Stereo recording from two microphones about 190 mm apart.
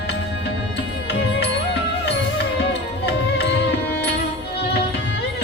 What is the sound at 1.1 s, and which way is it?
Music, 60° left (ahead or behind).